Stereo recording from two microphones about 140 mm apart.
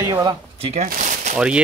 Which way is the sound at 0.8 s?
70° right (ahead or behind).